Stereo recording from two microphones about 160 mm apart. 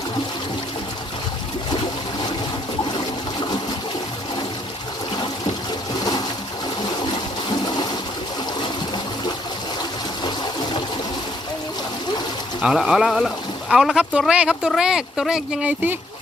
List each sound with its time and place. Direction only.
6.0 s pigeon: 25° left (ahead or behind)
12.6 s speech: centre (ahead or behind)